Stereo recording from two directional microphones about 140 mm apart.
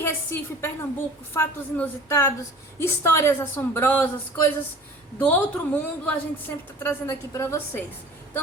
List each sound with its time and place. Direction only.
0.0 s a woman's voice: 15° left (ahead or behind)